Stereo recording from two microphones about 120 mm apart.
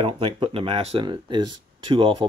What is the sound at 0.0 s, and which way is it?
Speech, 50° right (ahead or behind).